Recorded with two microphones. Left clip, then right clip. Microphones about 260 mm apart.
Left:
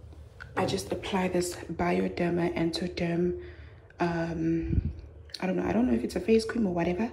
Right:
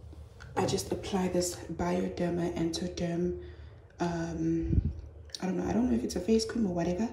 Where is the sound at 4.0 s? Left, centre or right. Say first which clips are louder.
Left 4 dB; centre.